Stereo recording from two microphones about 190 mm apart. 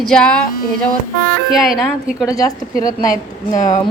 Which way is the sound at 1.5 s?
Centre (ahead or behind).